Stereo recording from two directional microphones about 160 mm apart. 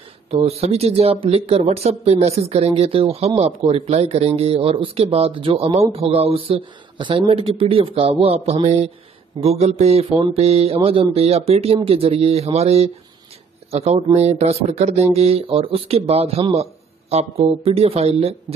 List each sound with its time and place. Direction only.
0.3 s speech: 40° right (ahead or behind)